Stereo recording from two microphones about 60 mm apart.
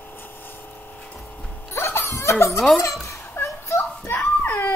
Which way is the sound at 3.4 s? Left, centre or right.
Left.